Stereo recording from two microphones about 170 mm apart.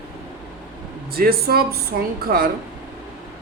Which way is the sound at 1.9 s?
75° right (ahead or behind).